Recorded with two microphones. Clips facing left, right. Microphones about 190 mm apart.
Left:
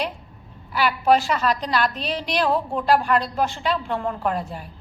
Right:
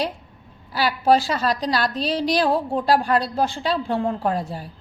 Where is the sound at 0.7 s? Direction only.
35° right (ahead or behind).